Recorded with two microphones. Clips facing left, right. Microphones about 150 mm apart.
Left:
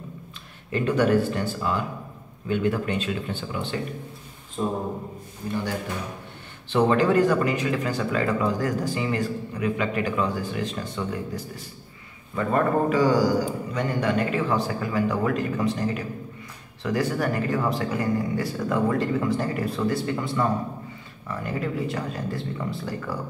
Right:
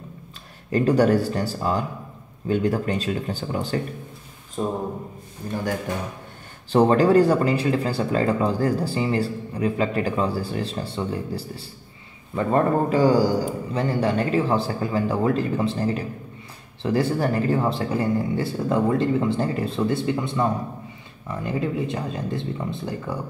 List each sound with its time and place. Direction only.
0.7 s speech: 35° right (ahead or behind)
5.4 s speech: 40° right (ahead or behind)
6.7 s speech: 35° right (ahead or behind)